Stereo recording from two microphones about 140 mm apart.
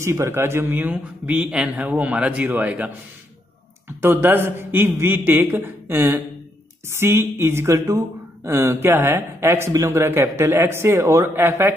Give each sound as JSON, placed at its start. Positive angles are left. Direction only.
{"t": 0.0, "sound": "speech", "side_deg": -20}
{"t": 4.0, "sound": "speech", "side_deg": -15}